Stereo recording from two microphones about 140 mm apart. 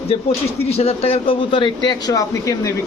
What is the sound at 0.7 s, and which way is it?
Speech, 45° left (ahead or behind).